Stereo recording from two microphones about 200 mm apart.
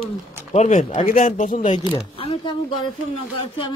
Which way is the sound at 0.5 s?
35° left (ahead or behind).